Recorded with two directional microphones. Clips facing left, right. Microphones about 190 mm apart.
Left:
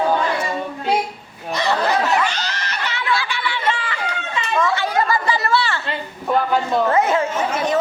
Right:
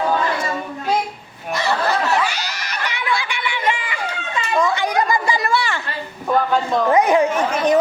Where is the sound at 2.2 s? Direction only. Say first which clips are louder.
Left 1 dB; 10° right (ahead or behind).